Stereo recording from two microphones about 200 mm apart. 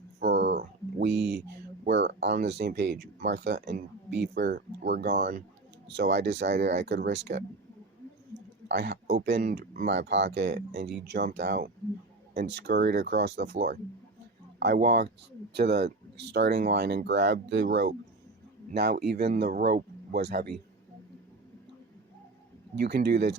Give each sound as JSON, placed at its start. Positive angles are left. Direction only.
{"t": 0.2, "sound": "a sound", "side_deg": -60}
{"t": 1.9, "sound": "speech", "side_deg": -60}
{"t": 6.0, "sound": "speech", "side_deg": -60}
{"t": 8.6, "sound": "a man's voice", "side_deg": -60}
{"t": 22.7, "sound": "speech", "side_deg": -55}